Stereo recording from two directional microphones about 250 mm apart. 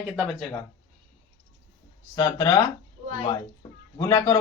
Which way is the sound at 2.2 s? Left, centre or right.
Centre.